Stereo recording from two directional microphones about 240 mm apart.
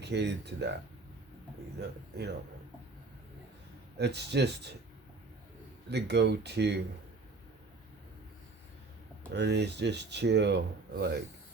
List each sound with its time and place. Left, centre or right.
0.0 s speech: right
1.8 s speech: right
3.9 s speech: right
5.9 s speech: right
9.3 s speech: right